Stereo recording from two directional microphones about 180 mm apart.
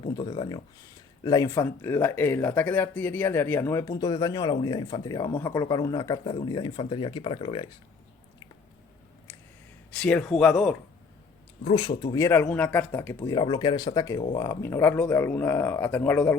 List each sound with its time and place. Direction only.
0.0 s speech: 25° left (ahead or behind)
9.9 s speech: 5° left (ahead or behind)
11.6 s speech: 30° left (ahead or behind); by 16.4 s 10° left (ahead or behind)